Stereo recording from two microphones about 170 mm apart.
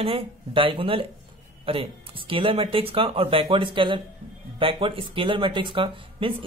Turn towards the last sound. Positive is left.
turn(degrees=-30)  # may be behind; listen again after turning